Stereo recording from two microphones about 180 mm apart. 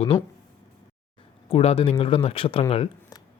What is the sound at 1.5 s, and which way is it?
Speech, 35° left (ahead or behind).